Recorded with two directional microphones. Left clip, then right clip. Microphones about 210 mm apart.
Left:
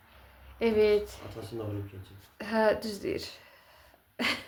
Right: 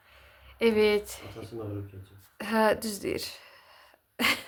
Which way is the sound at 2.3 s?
25° right (ahead or behind).